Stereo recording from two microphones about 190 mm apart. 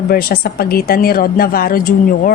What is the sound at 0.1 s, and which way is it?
A woman's voice, 50° left (ahead or behind).